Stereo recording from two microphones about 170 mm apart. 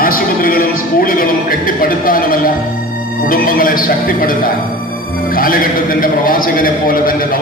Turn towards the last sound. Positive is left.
turn(degrees=55)  # may be behind; listen again after turning